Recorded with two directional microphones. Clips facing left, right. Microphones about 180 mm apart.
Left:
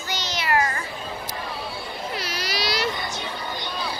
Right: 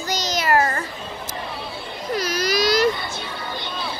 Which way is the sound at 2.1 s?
45° right (ahead or behind).